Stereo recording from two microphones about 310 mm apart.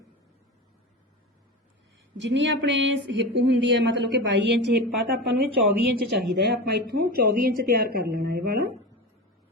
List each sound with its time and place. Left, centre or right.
2.1 s a woman's voice: right
4.7 s speech: right
6.3 s a woman's voice: right